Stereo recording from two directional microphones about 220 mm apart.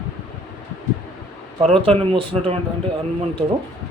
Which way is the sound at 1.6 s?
25° right (ahead or behind).